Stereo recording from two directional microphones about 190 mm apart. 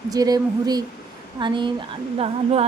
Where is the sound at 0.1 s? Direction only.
20° right (ahead or behind).